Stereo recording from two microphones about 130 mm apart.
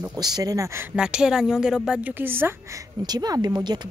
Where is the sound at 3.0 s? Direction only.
30° right (ahead or behind).